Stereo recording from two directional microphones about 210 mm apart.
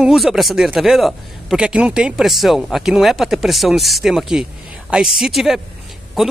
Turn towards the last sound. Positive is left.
turn(degrees=0)  # may be behind; listen again after turning